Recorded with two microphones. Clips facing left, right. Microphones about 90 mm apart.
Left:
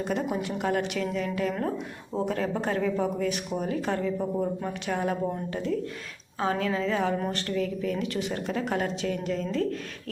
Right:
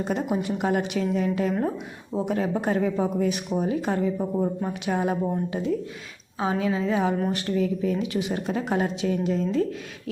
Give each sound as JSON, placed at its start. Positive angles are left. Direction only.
{"t": 0.0, "sound": "a woman's voice", "side_deg": -20}